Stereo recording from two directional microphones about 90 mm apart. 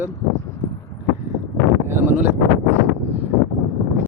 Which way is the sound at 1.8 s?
25° right (ahead or behind).